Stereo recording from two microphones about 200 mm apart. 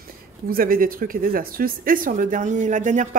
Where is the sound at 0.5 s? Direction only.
45° right (ahead or behind).